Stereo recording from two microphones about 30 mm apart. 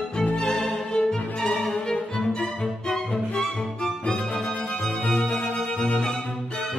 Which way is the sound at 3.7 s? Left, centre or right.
Left.